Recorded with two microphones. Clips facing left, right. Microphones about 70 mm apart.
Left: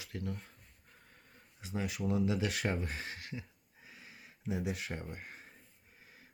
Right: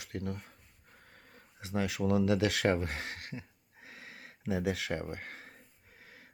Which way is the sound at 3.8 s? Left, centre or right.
Right.